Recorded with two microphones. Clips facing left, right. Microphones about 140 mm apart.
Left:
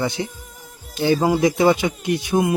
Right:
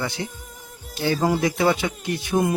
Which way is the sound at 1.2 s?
15° left (ahead or behind).